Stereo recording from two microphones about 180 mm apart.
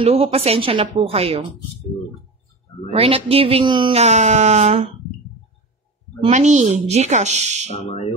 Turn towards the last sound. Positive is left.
turn(degrees=35)  # may be behind; listen again after turning